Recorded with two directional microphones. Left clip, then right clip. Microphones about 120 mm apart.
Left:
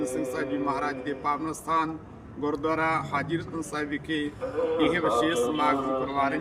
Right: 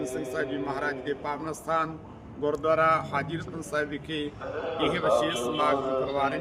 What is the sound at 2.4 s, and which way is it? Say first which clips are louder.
A man's voice: right 3 dB; 5° left (ahead or behind).